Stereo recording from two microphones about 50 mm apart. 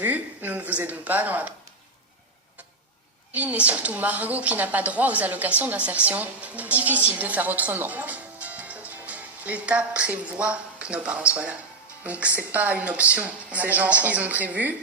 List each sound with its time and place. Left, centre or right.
0.0 s a woman's voice: right
3.3 s a woman's voice: right